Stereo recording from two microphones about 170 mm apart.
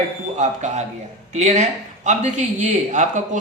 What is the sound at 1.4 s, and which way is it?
Speech, 40° right (ahead or behind).